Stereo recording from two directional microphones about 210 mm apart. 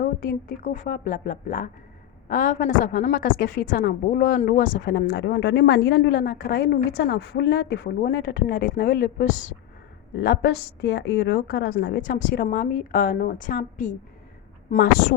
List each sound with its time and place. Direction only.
0.0 s a woman's voice: 40° left (ahead or behind)